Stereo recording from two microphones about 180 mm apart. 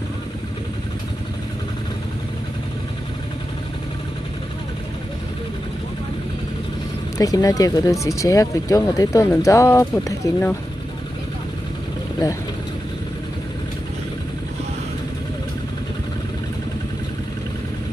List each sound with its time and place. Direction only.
7.2 s speech: 20° left (ahead or behind)